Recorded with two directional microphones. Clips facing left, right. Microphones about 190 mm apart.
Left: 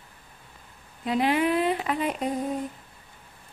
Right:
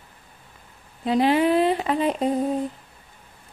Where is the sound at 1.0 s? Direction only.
30° right (ahead or behind).